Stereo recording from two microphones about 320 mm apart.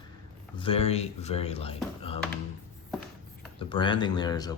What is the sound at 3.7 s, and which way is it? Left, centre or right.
Speech, centre.